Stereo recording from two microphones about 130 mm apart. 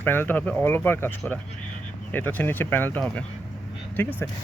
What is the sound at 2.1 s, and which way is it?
Speech, 15° left (ahead or behind).